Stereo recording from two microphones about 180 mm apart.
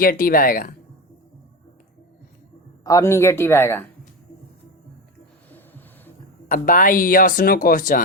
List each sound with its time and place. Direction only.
0.0 s speech: 55° left (ahead or behind)
2.8 s speech: 15° left (ahead or behind)
5.5 s a sound: 10° left (ahead or behind)
6.5 s speech: 50° left (ahead or behind)